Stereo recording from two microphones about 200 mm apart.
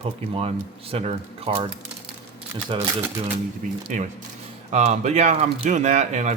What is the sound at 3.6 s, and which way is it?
Speech, 40° right (ahead or behind).